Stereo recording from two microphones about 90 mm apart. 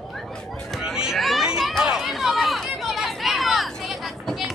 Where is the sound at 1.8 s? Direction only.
5° right (ahead or behind).